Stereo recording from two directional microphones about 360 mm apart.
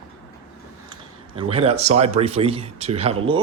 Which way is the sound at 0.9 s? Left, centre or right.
Centre.